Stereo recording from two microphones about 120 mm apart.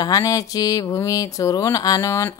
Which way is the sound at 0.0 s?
30° left (ahead or behind).